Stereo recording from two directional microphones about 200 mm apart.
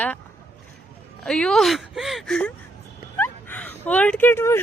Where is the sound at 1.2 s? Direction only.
5° left (ahead or behind).